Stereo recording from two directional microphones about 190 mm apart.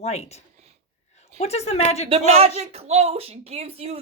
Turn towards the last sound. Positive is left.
turn(degrees=-30)  # may be behind; listen again after turning